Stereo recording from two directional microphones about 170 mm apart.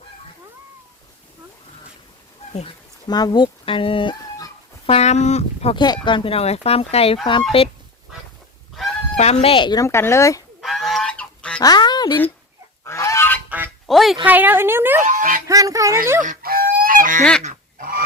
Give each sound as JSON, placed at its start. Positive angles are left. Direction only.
{"t": 2.5, "sound": "speech", "side_deg": 40}
{"t": 3.1, "sound": "speech", "side_deg": 25}
{"t": 4.9, "sound": "speech", "side_deg": 40}
{"t": 5.8, "sound": "speech", "side_deg": 25}
{"t": 9.1, "sound": "speech", "side_deg": 40}
{"t": 10.6, "sound": "goose", "side_deg": 0}
{"t": 11.6, "sound": "speech", "side_deg": 25}
{"t": 12.8, "sound": "goose", "side_deg": 15}
{"t": 13.8, "sound": "speech", "side_deg": 0}
{"t": 14.3, "sound": "a woman's voice", "side_deg": -10}
{"t": 15.0, "sound": "music", "side_deg": -50}
{"t": 15.4, "sound": "speech", "side_deg": -20}
{"t": 16.2, "sound": "fowl", "side_deg": -55}
{"t": 17.4, "sound": "goose", "side_deg": -50}